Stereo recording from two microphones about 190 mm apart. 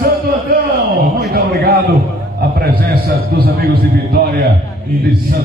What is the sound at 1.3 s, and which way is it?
A man's voice, 55° right (ahead or behind).